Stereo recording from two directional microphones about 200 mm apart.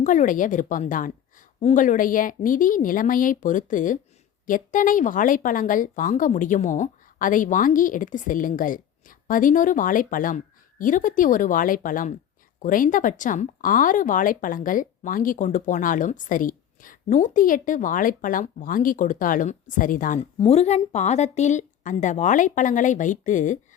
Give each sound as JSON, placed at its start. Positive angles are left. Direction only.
{"t": 0.0, "sound": "speech", "side_deg": 40}
{"t": 20.1, "sound": "speech", "side_deg": 30}